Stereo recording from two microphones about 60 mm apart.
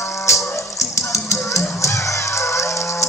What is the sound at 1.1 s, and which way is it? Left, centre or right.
Music, left.